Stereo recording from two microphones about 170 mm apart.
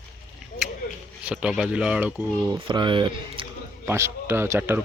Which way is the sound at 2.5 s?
25° right (ahead or behind).